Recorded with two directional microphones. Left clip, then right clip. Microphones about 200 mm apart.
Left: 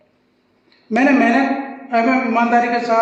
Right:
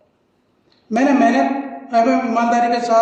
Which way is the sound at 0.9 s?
Centre (ahead or behind).